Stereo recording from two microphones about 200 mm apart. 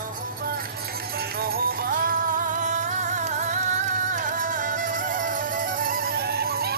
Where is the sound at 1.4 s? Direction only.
50° right (ahead or behind).